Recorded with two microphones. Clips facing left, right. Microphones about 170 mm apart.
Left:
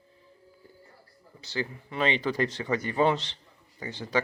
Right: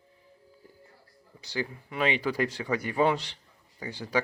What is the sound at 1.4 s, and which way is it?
Speech, 10° right (ahead or behind).